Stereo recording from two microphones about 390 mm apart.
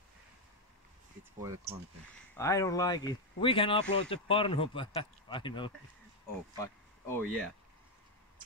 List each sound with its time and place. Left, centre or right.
1.4 s speech: centre
2.3 s speech: centre